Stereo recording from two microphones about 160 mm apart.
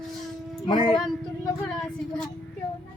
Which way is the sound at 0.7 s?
30° left (ahead or behind).